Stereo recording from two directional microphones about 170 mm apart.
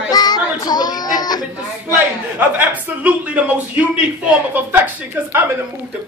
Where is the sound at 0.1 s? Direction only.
25° left (ahead or behind).